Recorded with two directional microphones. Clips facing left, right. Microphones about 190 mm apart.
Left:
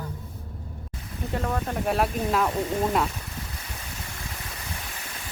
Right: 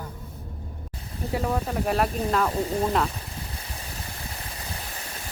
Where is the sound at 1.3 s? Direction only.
10° right (ahead or behind).